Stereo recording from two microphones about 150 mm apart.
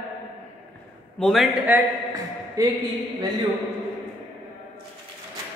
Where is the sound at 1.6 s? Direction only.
15° right (ahead or behind).